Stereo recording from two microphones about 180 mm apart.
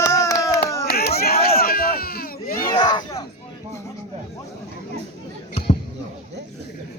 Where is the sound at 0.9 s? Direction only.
60° left (ahead or behind).